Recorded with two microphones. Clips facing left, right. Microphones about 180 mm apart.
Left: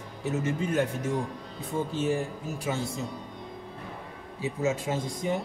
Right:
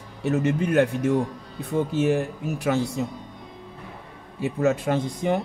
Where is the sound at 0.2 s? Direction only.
65° right (ahead or behind).